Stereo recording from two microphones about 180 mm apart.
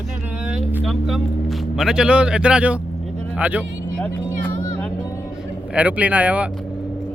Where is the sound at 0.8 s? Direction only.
Centre (ahead or behind).